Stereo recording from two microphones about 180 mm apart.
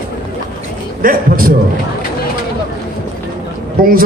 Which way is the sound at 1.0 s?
55° right (ahead or behind).